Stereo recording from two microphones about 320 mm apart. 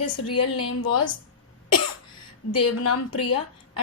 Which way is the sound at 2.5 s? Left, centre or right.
Left.